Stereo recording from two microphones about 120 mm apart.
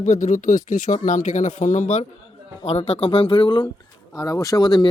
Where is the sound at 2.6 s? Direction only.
60° left (ahead or behind); by 3.7 s 40° left (ahead or behind).